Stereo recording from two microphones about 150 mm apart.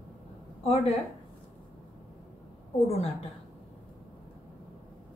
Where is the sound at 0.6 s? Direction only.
40° left (ahead or behind).